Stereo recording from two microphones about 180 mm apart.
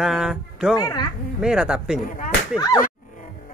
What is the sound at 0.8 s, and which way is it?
Speech, 20° left (ahead or behind).